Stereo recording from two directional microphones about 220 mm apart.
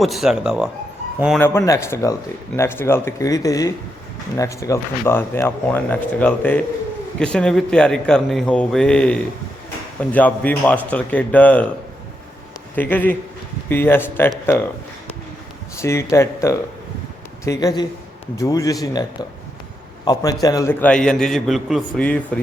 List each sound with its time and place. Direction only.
0.0 s a man's voice: centre (ahead or behind)
1.4 s a man's voice: 10° left (ahead or behind)
12.7 s speech: 10° left (ahead or behind)
15.8 s speech: 10° left (ahead or behind)
20.1 s a man's voice: 15° left (ahead or behind)